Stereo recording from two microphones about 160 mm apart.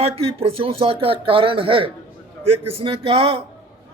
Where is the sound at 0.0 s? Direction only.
35° right (ahead or behind).